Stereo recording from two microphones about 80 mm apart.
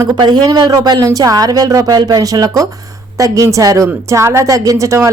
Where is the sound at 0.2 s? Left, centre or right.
Right.